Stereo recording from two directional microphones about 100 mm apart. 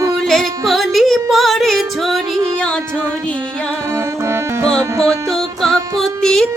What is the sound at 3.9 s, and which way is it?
Music, 25° right (ahead or behind).